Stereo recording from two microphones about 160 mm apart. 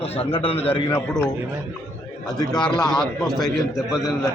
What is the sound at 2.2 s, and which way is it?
A man's voice, 5° left (ahead or behind).